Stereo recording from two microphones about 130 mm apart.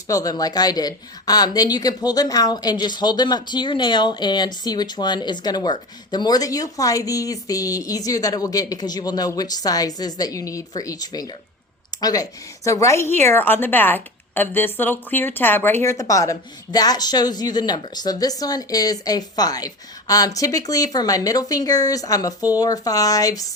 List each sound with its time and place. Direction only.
0.1 s a woman's voice: 30° left (ahead or behind)